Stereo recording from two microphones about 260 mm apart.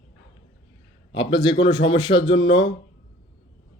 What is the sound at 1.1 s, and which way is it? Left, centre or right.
Speech, centre.